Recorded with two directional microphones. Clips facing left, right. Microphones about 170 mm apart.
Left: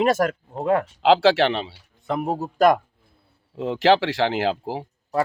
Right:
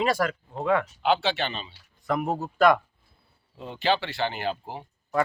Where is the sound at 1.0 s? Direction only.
90° left.